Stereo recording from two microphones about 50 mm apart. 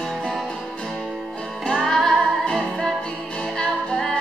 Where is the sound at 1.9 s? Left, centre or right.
Centre.